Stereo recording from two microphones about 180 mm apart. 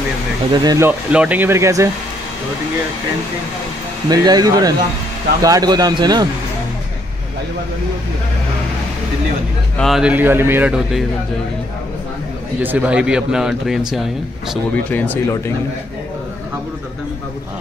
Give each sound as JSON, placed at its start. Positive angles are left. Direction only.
{"t": 0.5, "sound": "speech", "side_deg": -20}
{"t": 0.8, "sound": "speech", "side_deg": -5}
{"t": 4.1, "sound": "speech", "side_deg": -20}
{"t": 9.8, "sound": "a man's voice", "side_deg": 0}
{"t": 12.5, "sound": "a man's voice", "side_deg": -10}
{"t": 14.9, "sound": "speech", "side_deg": 10}